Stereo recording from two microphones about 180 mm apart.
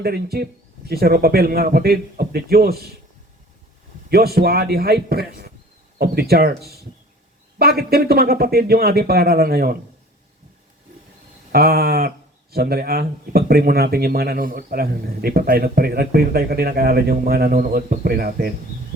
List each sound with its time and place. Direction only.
0.0 s speech: 60° right (ahead or behind)
4.1 s speech: 60° right (ahead or behind)
7.6 s speech: 60° right (ahead or behind)
11.5 s speech: 60° right (ahead or behind)